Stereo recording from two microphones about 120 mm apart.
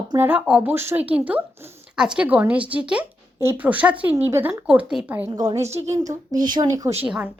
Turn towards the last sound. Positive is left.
turn(degrees=-10)  # may be behind; listen again after turning